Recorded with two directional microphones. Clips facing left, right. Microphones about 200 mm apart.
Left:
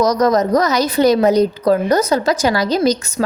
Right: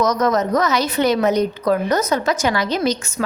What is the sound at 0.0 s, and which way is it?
A woman's voice, 35° left (ahead or behind).